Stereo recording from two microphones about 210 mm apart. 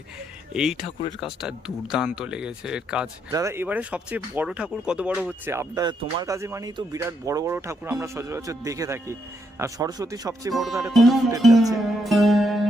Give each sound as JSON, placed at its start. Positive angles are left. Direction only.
{"t": 0.5, "sound": "speech", "side_deg": -5}
{"t": 10.5, "sound": "speech", "side_deg": 0}
{"t": 11.7, "sound": "music", "side_deg": 0}